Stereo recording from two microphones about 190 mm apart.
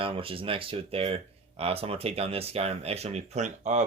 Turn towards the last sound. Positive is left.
turn(degrees=-40)  # may be behind; listen again after turning